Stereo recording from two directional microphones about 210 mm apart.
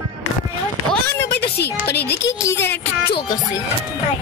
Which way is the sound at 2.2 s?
15° left (ahead or behind).